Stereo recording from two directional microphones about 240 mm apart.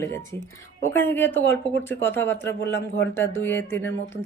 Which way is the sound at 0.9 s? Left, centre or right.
Centre.